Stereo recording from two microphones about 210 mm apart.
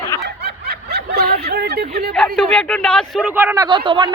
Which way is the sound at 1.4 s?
50° right (ahead or behind).